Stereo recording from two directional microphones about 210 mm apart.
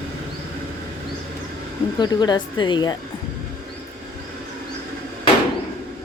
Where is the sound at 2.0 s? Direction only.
20° left (ahead or behind).